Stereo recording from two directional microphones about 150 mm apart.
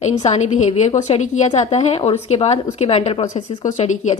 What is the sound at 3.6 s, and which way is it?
Speech, 55° left (ahead or behind).